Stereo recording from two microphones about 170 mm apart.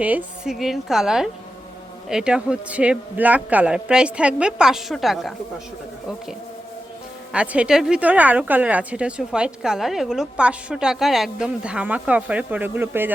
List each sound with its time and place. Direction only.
0.0 s a man's voice: 10° right (ahead or behind)
7.3 s a woman's voice: 5° right (ahead or behind)